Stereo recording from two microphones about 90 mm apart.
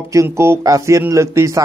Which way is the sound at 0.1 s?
35° right (ahead or behind).